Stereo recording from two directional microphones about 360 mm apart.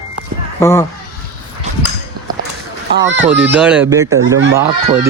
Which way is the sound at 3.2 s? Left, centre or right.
Centre.